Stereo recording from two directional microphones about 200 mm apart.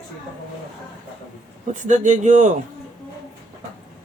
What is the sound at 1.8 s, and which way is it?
Speech, 40° right (ahead or behind).